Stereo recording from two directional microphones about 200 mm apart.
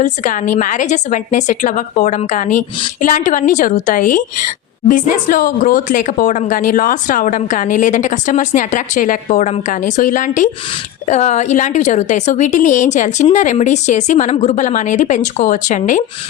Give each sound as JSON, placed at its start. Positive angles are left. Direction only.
{"t": 0.0, "sound": "a woman's voice", "side_deg": 40}